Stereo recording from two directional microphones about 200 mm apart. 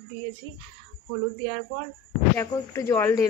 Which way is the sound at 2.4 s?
15° left (ahead or behind).